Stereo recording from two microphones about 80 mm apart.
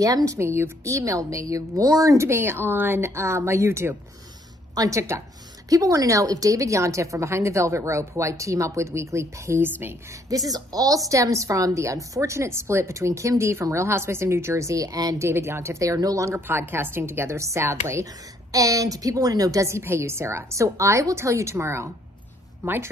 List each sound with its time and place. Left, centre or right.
0.0 s a woman's voice: right
10.3 s a woman's voice: right
15.1 s a woman's voice: right
16.3 s a woman's voice: right
18.5 s a woman's voice: right